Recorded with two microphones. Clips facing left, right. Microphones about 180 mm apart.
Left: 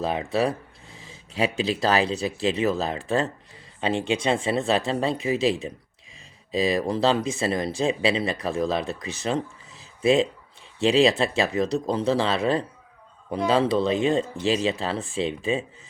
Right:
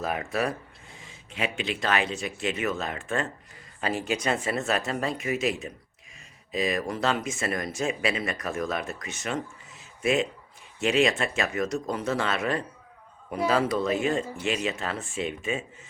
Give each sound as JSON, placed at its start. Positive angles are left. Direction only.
{"t": 0.3, "sound": "speech", "side_deg": 30}